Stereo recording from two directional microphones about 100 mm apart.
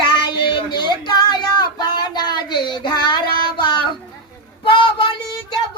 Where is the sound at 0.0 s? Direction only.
55° left (ahead or behind).